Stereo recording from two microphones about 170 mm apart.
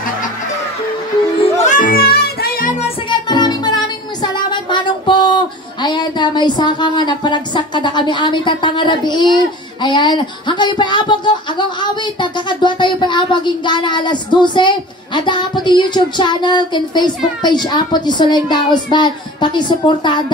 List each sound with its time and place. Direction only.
1.4 s music: 45° left (ahead or behind)
3.1 s music: 25° left (ahead or behind)
9.8 s speech: 25° left (ahead or behind)